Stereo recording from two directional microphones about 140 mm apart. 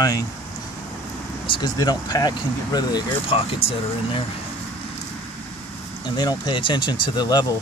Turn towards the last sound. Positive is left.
turn(degrees=30)  # may be behind; listen again after turning